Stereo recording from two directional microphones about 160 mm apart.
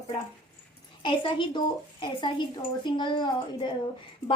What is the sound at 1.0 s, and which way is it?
A woman's voice, 30° left (ahead or behind).